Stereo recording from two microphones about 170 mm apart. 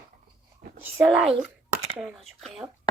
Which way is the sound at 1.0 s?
5° right (ahead or behind).